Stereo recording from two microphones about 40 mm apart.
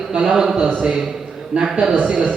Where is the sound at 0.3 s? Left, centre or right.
Centre.